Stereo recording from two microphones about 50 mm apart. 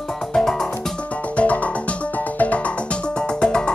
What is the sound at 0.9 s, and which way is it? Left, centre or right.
Music, left.